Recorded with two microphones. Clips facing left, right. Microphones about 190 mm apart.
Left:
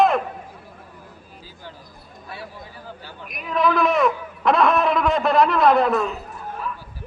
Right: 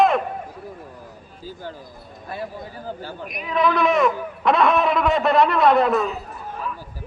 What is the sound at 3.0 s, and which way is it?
Speech, 45° right (ahead or behind).